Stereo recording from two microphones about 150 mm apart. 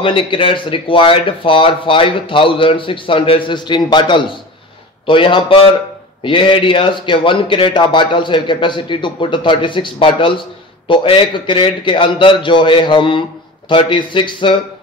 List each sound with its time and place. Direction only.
0.0 s speech: 35° left (ahead or behind)